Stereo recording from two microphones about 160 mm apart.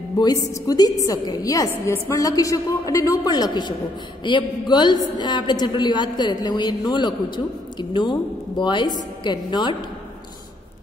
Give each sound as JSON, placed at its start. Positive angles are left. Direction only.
{"t": 0.2, "sound": "a woman's voice", "side_deg": 25}